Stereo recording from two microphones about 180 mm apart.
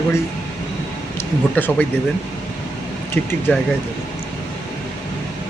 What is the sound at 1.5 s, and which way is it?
Speech, 10° left (ahead or behind).